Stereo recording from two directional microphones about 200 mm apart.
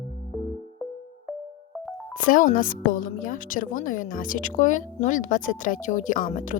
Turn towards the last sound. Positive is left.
turn(degrees=40)  # may be behind; listen again after turning